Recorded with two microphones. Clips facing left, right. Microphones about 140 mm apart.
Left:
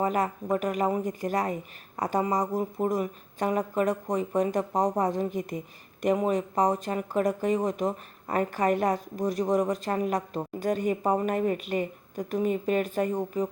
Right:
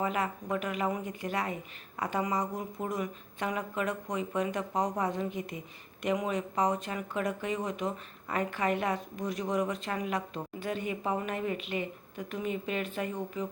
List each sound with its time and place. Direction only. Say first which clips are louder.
0.0 s speech: left 5 dB; 40° left (ahead or behind)